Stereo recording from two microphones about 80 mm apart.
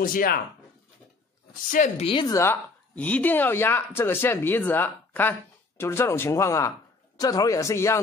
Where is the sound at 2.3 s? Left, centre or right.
Left.